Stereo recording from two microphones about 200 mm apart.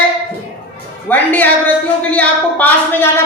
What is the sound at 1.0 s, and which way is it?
A woman's voice, 10° left (ahead or behind).